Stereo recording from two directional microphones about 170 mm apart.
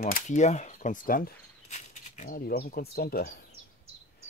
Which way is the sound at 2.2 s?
60° left (ahead or behind).